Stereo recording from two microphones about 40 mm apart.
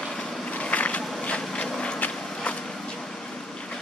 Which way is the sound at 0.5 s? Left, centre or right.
Left.